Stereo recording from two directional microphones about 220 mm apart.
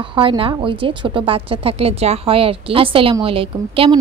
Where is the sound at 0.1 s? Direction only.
25° right (ahead or behind).